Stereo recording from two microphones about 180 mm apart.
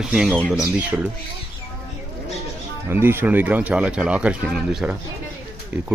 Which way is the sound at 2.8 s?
10° right (ahead or behind).